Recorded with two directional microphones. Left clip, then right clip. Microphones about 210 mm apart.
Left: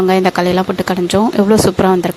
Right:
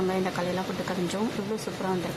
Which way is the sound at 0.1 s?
45° left (ahead or behind).